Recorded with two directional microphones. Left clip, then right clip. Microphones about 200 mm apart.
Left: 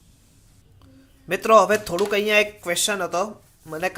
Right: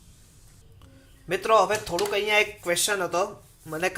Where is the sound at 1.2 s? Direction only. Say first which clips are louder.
Left 5 dB; 30° left (ahead or behind).